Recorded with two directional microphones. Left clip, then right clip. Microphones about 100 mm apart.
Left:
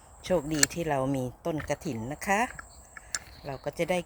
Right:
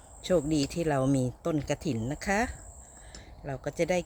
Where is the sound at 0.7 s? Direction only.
70° right (ahead or behind).